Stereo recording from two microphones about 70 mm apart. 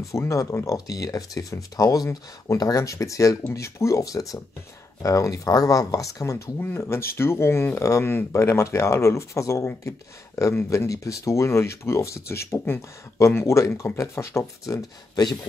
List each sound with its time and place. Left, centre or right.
0.3 s speech: left
6.6 s speech: left
8.0 s speech: left
10.5 s speech: left
10.9 s speech: left
14.7 s speech: left